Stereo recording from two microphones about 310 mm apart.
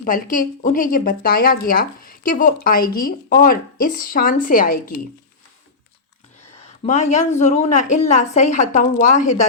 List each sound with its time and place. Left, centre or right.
0.0 s a woman's voice: left
6.6 s a sound: left
7.3 s a woman's voice: left